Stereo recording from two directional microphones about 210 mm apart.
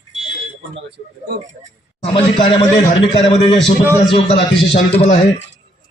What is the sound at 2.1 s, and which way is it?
A man's voice, 25° left (ahead or behind).